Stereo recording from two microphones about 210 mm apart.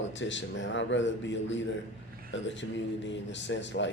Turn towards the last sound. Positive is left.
turn(degrees=60)  # may be behind; listen again after turning